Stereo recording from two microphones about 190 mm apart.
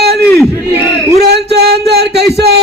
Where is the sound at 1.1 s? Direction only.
60° right (ahead or behind).